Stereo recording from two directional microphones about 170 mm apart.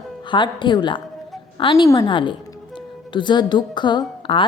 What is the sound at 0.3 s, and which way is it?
A woman's voice, 30° left (ahead or behind).